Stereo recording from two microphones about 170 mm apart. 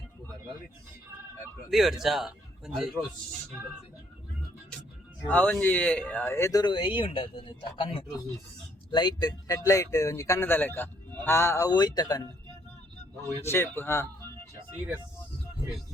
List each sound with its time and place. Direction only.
1.7 s a man's voice: centre (ahead or behind)
5.3 s speech: 10° left (ahead or behind)
13.4 s speech: 15° left (ahead or behind)